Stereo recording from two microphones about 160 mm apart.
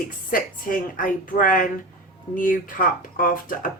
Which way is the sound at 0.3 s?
60° left (ahead or behind).